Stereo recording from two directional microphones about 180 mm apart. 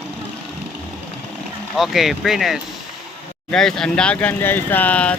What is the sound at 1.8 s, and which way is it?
Speech, centre (ahead or behind).